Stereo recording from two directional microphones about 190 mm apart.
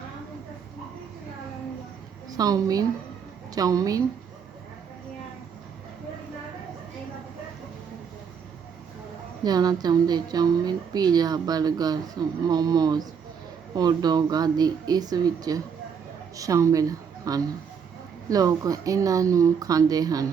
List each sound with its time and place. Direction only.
2.3 s speech: 20° right (ahead or behind)
9.4 s a woman's voice: 20° right (ahead or behind)